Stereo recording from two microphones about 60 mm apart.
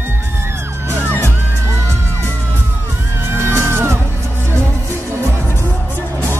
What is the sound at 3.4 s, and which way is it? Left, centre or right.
Music, right.